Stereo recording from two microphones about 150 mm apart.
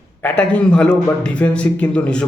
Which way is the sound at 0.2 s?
10° left (ahead or behind).